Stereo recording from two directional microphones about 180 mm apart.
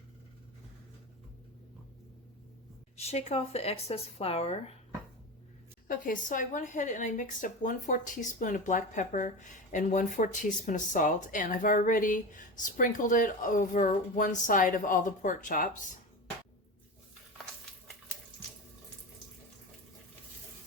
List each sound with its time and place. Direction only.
3.0 s speech: 35° left (ahead or behind)
5.9 s speech: 50° left (ahead or behind)